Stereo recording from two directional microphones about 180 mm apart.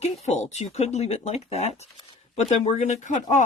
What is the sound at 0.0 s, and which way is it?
Speech, 40° left (ahead or behind).